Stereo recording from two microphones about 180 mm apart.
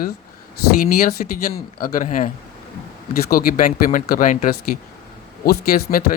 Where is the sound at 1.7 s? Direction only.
50° left (ahead or behind).